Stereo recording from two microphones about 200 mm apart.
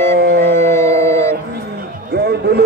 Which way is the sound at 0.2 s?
55° right (ahead or behind).